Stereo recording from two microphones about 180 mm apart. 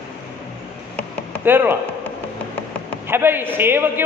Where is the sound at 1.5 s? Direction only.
10° right (ahead or behind).